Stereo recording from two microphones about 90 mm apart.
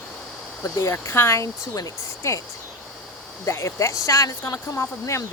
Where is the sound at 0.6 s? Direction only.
35° left (ahead or behind).